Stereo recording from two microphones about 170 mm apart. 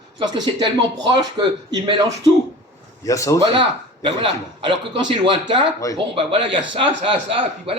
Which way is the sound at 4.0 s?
30° right (ahead or behind).